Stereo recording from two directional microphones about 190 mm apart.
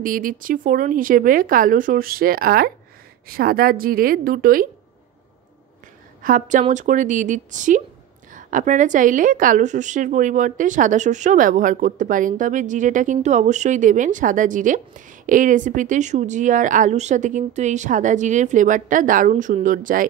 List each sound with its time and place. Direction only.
0.0 s speech: 45° right (ahead or behind)
6.2 s a woman's voice: 45° right (ahead or behind)